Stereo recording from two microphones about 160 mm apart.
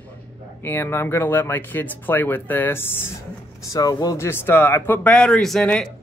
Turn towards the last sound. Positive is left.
turn(degrees=5)  # may be behind; listen again after turning